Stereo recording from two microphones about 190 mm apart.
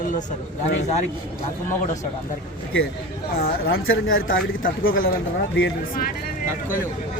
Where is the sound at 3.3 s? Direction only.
55° left (ahead or behind).